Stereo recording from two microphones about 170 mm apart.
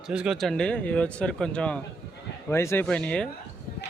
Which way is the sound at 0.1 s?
5° right (ahead or behind).